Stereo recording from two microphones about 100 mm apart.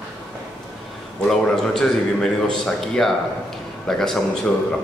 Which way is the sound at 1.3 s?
5° left (ahead or behind).